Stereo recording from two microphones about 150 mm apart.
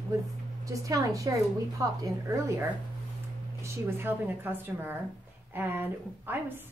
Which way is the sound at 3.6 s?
15° right (ahead or behind).